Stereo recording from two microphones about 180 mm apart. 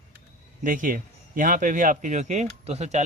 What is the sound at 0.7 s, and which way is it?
Speech, 50° right (ahead or behind).